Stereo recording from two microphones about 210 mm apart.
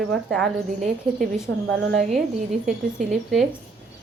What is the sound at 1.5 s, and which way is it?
Speech, 60° right (ahead or behind).